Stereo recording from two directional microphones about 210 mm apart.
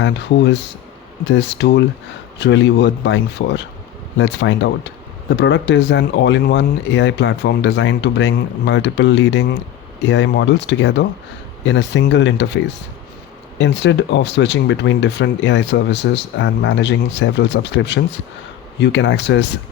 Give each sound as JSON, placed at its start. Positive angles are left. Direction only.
{"t": 0.0, "sound": "speech", "side_deg": 55}